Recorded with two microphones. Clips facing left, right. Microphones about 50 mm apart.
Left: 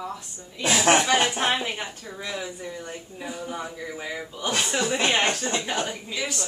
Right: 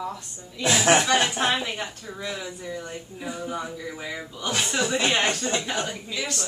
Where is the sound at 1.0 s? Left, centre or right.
Centre.